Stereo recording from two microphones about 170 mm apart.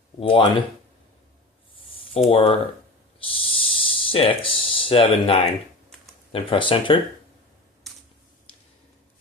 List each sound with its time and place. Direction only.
0.2 s speech: 30° left (ahead or behind)
2.0 s speech: 35° left (ahead or behind)
3.2 s a sound: 30° left (ahead or behind)
6.3 s speech: 30° left (ahead or behind)